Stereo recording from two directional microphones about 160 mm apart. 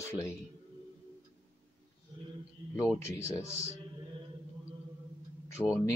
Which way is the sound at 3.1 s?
20° left (ahead or behind).